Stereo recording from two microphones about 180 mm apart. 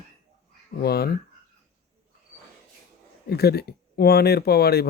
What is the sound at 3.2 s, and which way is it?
Speech, 60° left (ahead or behind).